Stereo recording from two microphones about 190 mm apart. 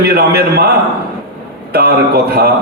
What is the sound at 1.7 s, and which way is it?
Speech, 55° right (ahead or behind).